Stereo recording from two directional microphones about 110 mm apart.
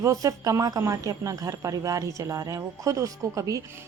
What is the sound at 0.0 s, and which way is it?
A woman's voice, 30° right (ahead or behind).